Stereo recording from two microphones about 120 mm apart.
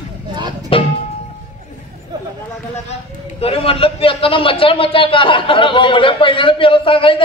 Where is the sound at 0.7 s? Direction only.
50° left (ahead or behind).